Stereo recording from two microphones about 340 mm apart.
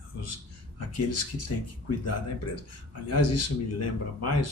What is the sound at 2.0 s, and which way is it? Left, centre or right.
Speech, left.